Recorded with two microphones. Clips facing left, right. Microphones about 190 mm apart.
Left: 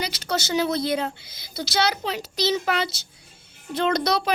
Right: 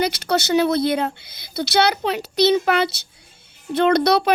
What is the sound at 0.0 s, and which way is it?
A woman's voice, 60° right (ahead or behind).